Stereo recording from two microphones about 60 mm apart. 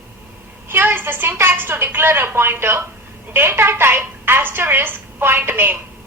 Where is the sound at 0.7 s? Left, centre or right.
Right.